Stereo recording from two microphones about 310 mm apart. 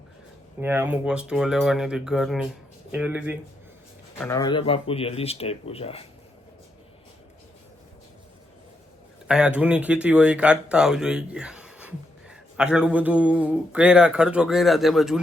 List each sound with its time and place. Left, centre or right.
0.6 s speech: centre
4.2 s speech: centre
9.2 s speech: centre